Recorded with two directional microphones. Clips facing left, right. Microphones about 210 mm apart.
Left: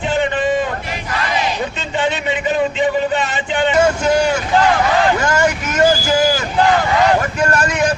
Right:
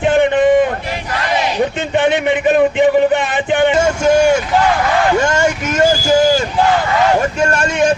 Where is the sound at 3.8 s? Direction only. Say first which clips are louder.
Right 2 dB; 25° right (ahead or behind).